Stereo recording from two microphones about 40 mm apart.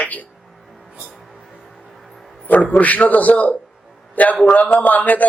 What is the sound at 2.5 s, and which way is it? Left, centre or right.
Speech, left.